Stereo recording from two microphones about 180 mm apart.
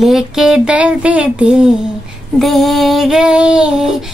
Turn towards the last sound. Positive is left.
turn(degrees=-5)  # may be behind; listen again after turning